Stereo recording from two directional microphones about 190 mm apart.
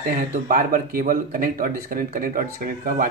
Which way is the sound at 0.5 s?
50° right (ahead or behind).